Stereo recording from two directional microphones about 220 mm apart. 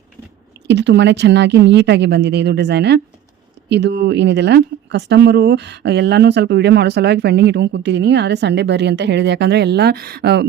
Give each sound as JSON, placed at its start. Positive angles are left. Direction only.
{"t": 0.7, "sound": "speech", "side_deg": -50}